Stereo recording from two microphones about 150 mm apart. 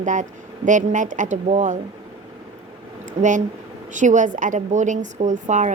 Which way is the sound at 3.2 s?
55° right (ahead or behind).